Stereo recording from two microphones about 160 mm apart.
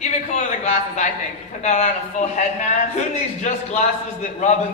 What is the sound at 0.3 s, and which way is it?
Speech, 45° left (ahead or behind).